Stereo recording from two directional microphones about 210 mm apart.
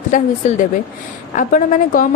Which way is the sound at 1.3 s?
40° left (ahead or behind).